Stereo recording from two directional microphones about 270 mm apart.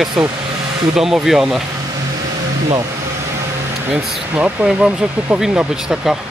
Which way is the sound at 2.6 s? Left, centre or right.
Centre.